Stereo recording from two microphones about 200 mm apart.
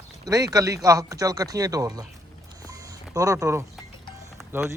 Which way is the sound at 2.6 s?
15° right (ahead or behind).